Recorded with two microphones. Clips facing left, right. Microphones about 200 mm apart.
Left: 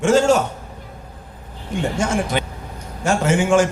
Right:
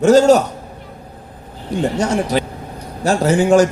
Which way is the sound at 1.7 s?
35° right (ahead or behind).